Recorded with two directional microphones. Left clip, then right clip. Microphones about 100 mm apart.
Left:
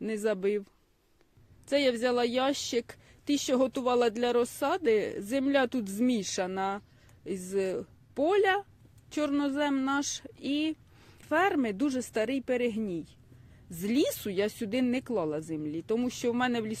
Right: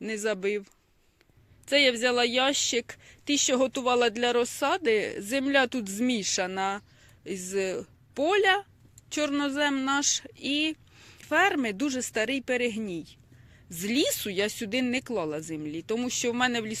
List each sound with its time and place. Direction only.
0.0 s speech: 35° left (ahead or behind)
1.6 s speech: 20° left (ahead or behind)